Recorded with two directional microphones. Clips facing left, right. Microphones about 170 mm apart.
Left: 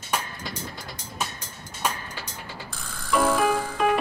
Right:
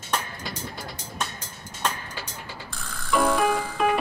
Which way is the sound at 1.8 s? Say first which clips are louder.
Even; 10° left (ahead or behind).